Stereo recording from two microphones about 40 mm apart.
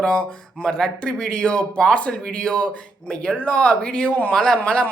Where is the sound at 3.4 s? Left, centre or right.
Left.